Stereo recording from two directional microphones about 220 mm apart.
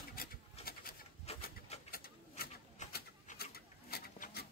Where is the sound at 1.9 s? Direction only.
45° left (ahead or behind).